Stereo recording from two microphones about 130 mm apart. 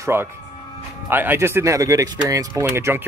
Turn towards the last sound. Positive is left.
turn(degrees=-20)  # may be behind; listen again after turning